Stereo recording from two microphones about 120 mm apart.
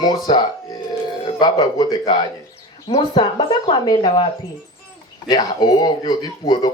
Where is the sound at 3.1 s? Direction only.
35° left (ahead or behind).